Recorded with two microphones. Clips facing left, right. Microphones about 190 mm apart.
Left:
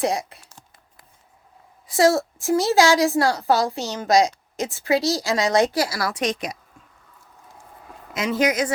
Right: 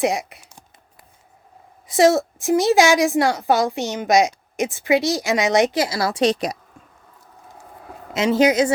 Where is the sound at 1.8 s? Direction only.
20° right (ahead or behind).